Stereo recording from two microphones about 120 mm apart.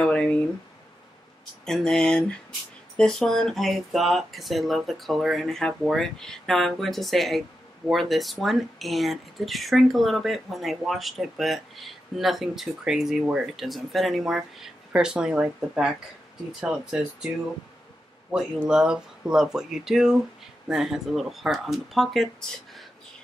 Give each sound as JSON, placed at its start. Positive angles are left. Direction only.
{"t": 0.0, "sound": "a sound", "side_deg": 10}
{"t": 1.7, "sound": "speech", "side_deg": 5}
{"t": 18.3, "sound": "speech", "side_deg": -5}